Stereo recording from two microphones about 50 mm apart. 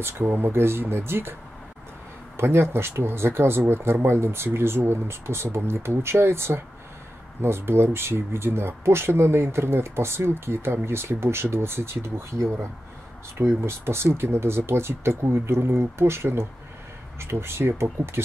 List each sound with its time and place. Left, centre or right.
0.0 s speech: right
2.3 s speech: right
13.4 s speech: right